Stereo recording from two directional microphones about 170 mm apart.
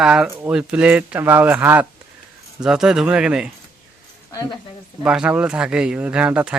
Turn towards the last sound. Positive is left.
turn(degrees=-10)  # may be behind; listen again after turning